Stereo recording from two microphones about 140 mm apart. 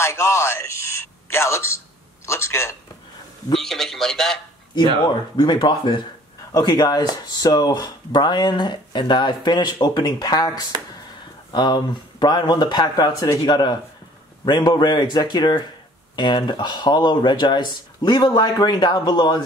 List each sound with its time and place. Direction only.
0.0 s a man's voice: 20° left (ahead or behind)
3.5 s a man's voice: 5° left (ahead or behind)
5.4 s speech: 30° left (ahead or behind)